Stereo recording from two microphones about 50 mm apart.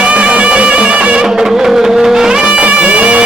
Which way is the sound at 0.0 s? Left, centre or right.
Right.